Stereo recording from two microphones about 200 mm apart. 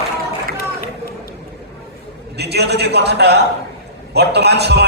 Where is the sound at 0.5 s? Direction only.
50° left (ahead or behind).